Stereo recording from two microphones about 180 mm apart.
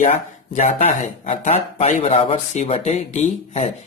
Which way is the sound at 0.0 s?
40° left (ahead or behind).